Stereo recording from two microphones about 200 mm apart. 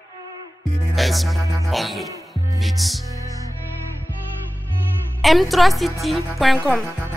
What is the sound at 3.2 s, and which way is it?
Music, 15° right (ahead or behind).